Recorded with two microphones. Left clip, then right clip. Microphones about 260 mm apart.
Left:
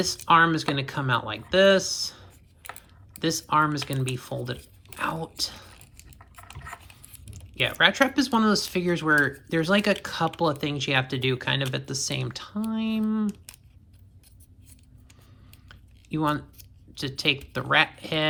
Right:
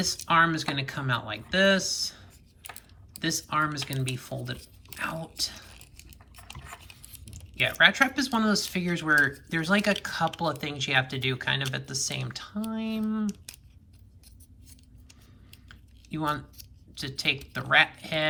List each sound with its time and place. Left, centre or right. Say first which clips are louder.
0.0 s speech: left 3 dB; centre
15.7 s typing: left 6 dB; centre
16.9 s speech: left 3 dB; centre